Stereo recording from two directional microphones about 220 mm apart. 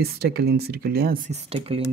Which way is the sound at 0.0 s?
45° right (ahead or behind).